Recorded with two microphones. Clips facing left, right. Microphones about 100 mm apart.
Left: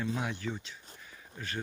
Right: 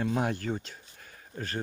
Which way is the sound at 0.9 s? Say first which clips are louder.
Right 8 dB; 50° right (ahead or behind).